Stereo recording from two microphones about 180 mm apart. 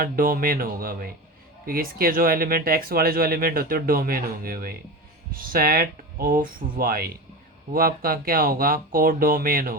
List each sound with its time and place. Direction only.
0.0 s speech: 55° right (ahead or behind)